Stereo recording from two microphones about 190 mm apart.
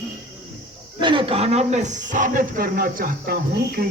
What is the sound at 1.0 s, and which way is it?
Speech, 25° right (ahead or behind).